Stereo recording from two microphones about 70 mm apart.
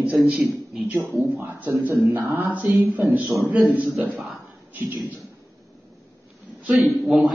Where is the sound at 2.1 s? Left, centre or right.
Right.